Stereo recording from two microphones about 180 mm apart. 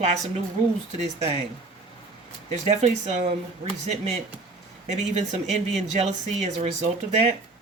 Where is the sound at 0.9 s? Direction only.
40° right (ahead or behind).